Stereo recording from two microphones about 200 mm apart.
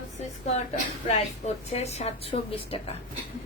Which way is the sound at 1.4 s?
35° left (ahead or behind).